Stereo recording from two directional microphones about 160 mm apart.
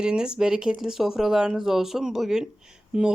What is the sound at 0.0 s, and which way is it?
Speech, 5° right (ahead or behind).